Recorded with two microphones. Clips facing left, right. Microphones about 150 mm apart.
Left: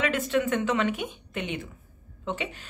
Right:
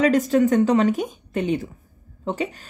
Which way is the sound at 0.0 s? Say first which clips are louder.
Right 8 dB; 40° right (ahead or behind).